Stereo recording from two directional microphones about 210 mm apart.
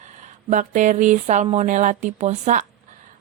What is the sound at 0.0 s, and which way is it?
Speech, 35° right (ahead or behind).